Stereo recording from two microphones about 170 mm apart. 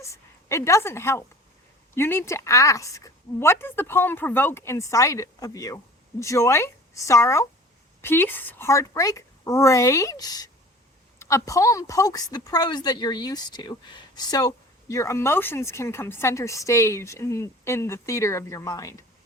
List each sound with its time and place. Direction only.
0.0 s a woman's voice: 15° left (ahead or behind)